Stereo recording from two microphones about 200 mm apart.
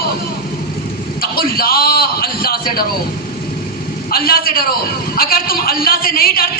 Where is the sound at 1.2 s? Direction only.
50° left (ahead or behind).